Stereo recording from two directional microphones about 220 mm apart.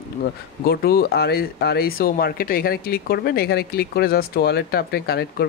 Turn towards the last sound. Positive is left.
turn(degrees=45)  # may be behind; listen again after turning